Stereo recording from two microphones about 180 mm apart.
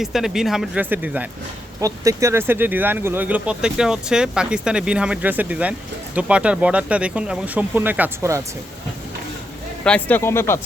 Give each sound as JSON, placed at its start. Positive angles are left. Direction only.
{"t": 0.0, "sound": "speech", "side_deg": 0}
{"t": 9.8, "sound": "speech", "side_deg": 10}